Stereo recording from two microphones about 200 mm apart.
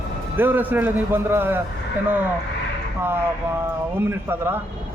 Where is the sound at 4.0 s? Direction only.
10° right (ahead or behind).